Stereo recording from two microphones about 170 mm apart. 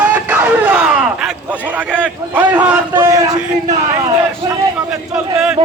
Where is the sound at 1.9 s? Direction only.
10° right (ahead or behind).